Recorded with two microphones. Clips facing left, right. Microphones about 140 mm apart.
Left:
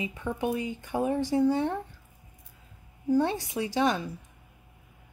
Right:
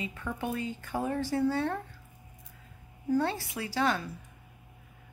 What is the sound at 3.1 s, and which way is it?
A woman's voice, 20° left (ahead or behind).